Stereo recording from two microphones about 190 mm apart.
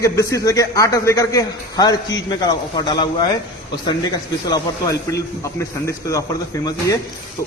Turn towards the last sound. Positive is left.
turn(degrees=15)  # may be behind; listen again after turning